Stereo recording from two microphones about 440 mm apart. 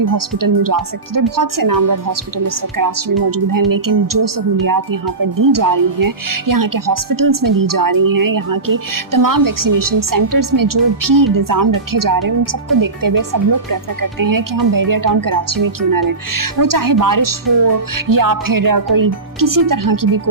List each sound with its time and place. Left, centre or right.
0.0 s speech: right